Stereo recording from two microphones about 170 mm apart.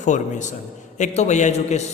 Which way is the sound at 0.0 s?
45° left (ahead or behind).